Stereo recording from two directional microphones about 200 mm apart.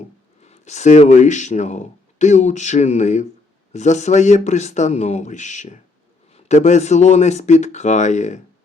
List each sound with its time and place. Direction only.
0.4 s speech: 35° left (ahead or behind)